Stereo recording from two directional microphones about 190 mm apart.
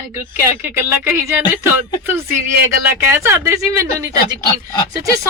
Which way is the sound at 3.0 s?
15° right (ahead or behind).